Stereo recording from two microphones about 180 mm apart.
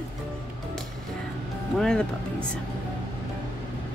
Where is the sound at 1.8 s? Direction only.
5° left (ahead or behind).